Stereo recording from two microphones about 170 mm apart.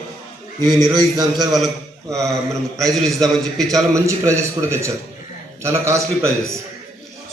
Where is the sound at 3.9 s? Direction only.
15° right (ahead or behind).